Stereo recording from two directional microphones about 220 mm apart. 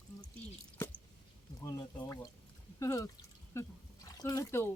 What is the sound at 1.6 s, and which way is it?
Speech, 15° left (ahead or behind).